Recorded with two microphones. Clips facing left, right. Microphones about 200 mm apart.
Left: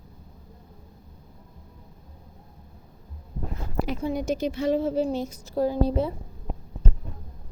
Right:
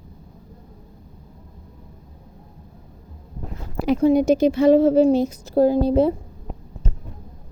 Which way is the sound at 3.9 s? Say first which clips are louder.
Right 13 dB; 75° right (ahead or behind).